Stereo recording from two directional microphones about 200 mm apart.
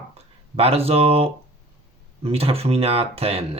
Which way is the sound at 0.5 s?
30° right (ahead or behind).